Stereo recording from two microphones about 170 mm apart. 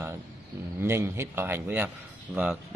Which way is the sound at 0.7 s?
15° right (ahead or behind).